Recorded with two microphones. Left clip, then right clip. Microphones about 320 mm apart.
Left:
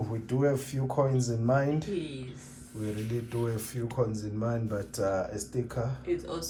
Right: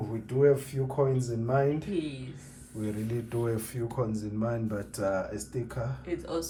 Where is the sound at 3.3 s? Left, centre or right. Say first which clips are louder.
Right 2 dB; centre.